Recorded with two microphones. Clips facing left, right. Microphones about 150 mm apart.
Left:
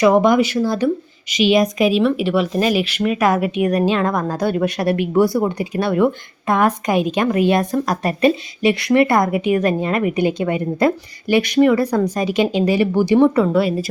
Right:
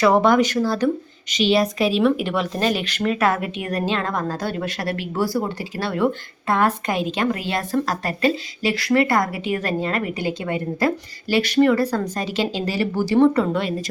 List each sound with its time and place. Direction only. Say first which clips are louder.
0.0 s a woman's voice: left 3 dB; 15° left (ahead or behind)
2.0 s a woman's voice: left 3 dB; centre (ahead or behind)